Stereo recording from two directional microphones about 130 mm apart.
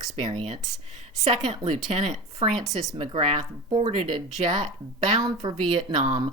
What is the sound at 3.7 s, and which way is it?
Speech, 35° right (ahead or behind).